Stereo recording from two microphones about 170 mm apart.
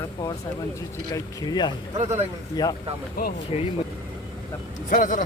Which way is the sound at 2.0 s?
40° right (ahead or behind).